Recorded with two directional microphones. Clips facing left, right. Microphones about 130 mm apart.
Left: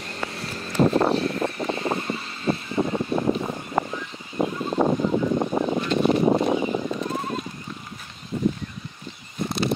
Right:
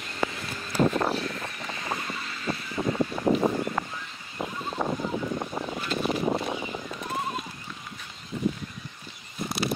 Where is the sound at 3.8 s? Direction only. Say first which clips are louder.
Left 7 dB; 25° left (ahead or behind).